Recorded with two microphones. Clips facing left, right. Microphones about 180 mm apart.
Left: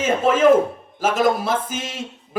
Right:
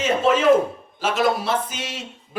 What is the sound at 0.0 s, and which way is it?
A man's voice, 50° left (ahead or behind).